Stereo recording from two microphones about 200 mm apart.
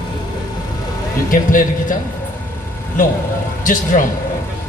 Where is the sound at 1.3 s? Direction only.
40° left (ahead or behind).